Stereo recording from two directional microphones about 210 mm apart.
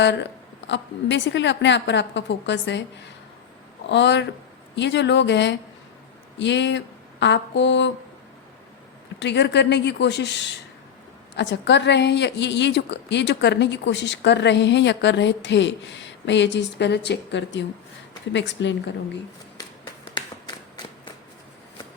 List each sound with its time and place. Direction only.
0.0 s speech: 55° left (ahead or behind)
9.1 s speech: 55° left (ahead or behind)